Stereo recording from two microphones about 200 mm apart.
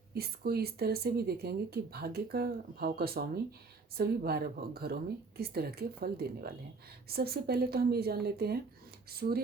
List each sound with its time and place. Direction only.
0.1 s speech: 50° right (ahead or behind)